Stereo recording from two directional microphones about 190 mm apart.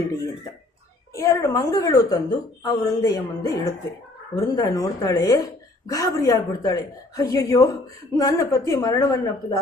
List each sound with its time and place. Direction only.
1.1 s a woman's voice: 15° left (ahead or behind)